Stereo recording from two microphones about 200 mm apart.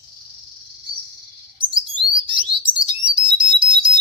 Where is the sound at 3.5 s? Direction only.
25° right (ahead or behind).